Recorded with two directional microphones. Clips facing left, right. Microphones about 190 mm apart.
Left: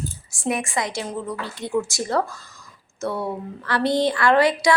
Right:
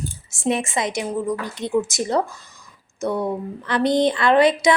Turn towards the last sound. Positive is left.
turn(degrees=-20)  # may be behind; listen again after turning